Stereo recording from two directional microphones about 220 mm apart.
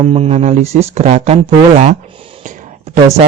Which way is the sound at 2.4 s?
35° right (ahead or behind).